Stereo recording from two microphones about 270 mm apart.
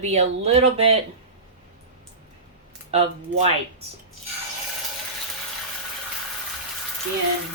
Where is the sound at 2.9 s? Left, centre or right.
Right.